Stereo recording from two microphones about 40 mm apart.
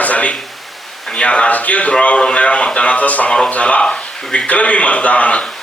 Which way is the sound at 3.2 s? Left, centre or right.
Centre.